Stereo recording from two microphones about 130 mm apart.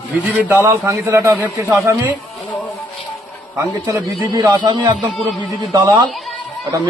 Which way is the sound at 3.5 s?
25° right (ahead or behind).